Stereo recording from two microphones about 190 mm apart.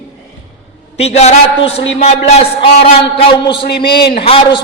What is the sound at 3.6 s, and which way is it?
Speech, 55° left (ahead or behind).